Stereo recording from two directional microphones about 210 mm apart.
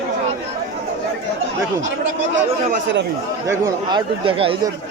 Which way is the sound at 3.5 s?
20° right (ahead or behind).